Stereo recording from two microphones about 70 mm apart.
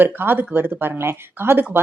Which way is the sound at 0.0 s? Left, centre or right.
Right.